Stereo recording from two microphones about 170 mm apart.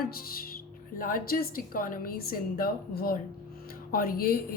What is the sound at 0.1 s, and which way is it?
A woman's voice, 60° left (ahead or behind).